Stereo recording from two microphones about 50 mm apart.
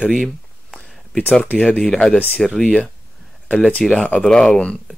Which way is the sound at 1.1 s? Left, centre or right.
Left.